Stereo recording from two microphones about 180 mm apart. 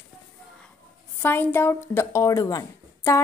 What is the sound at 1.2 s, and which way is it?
Speech, 10° left (ahead or behind).